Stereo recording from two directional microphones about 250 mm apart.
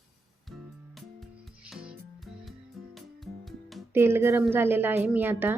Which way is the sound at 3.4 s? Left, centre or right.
Centre.